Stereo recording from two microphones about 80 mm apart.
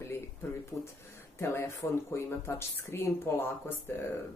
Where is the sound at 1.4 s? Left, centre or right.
Left.